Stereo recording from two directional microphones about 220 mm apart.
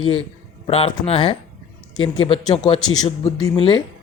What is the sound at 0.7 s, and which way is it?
A man's voice, 25° left (ahead or behind).